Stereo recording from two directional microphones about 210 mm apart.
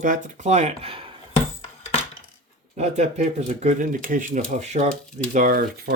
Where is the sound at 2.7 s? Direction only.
35° right (ahead or behind).